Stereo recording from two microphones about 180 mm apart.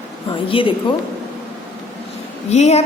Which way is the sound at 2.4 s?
40° left (ahead or behind).